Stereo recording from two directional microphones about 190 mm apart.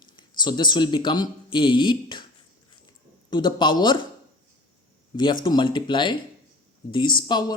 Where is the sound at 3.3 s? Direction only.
25° left (ahead or behind).